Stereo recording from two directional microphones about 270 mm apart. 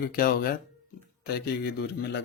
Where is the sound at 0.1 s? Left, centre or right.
Left.